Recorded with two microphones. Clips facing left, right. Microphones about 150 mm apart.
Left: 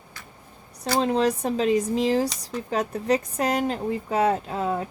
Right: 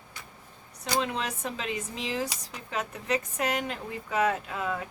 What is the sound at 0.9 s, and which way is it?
Speech, 35° left (ahead or behind).